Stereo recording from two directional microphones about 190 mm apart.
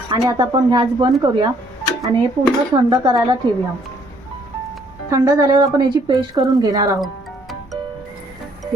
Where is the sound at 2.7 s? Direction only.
20° right (ahead or behind).